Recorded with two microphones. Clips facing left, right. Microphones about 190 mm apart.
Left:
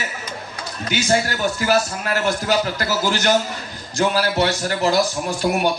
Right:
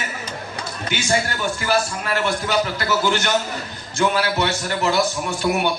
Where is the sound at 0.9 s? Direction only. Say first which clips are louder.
Left 3 dB; 40° left (ahead or behind).